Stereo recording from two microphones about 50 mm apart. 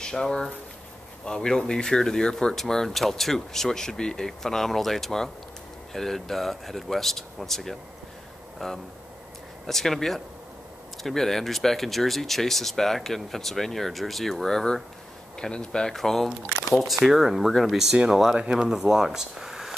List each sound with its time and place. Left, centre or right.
0.0 s speech: centre
15.9 s speech: centre
16.8 s speech: centre
18.0 s speech: centre